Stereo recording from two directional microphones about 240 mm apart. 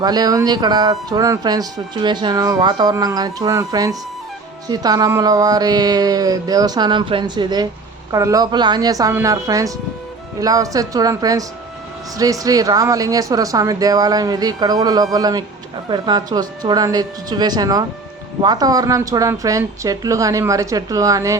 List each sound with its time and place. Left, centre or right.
0.0 s speech: centre